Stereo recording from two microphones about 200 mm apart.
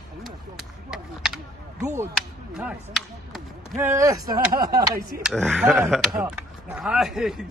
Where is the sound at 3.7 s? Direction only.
15° right (ahead or behind).